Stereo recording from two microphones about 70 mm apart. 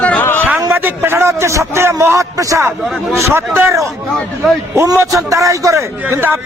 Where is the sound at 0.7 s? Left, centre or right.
Right.